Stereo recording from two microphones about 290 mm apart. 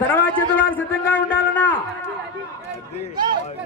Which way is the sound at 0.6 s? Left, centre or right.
Centre.